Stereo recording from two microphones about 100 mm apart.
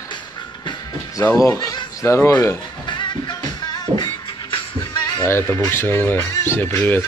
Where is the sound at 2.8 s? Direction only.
50° left (ahead or behind).